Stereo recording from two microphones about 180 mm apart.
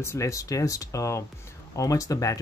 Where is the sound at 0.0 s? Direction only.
15° left (ahead or behind).